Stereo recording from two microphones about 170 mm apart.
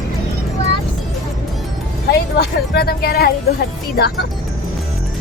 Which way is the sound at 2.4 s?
65° left (ahead or behind).